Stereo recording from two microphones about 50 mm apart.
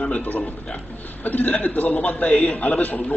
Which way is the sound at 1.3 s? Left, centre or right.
Left.